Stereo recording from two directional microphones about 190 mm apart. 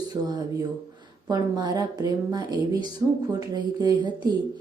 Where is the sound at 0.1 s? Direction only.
20° right (ahead or behind).